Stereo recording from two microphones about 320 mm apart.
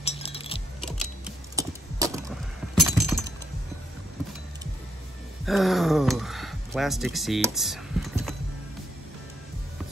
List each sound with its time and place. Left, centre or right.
0.1 s music: centre
0.8 s typing: centre
1.6 s keys jangling: centre
2.8 s glass: centre
5.4 s a sound: centre